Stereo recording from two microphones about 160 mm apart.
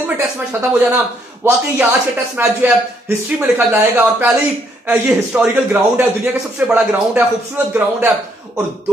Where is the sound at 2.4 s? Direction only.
10° right (ahead or behind).